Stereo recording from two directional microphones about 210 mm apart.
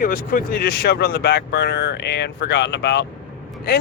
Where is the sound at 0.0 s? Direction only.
40° left (ahead or behind).